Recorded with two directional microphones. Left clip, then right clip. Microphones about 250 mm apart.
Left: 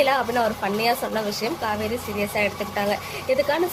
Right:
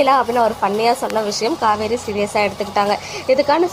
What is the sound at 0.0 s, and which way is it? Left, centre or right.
A woman's voice, centre.